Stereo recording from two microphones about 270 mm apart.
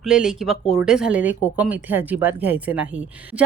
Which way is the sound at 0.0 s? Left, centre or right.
Centre.